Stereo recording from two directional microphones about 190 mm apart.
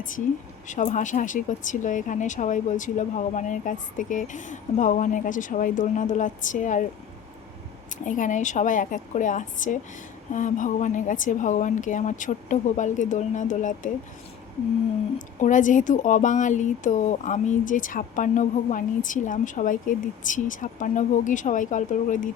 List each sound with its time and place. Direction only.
0.7 s speech: 40° left (ahead or behind)
8.0 s speech: 40° left (ahead or behind)
15.4 s speech: 40° left (ahead or behind)